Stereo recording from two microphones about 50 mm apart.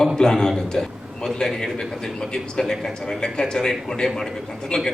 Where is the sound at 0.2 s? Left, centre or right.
Centre.